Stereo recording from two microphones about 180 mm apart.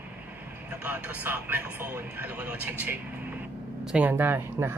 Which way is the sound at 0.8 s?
10° right (ahead or behind).